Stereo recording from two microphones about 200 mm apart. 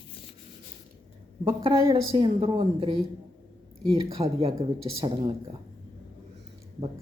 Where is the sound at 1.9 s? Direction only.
25° right (ahead or behind).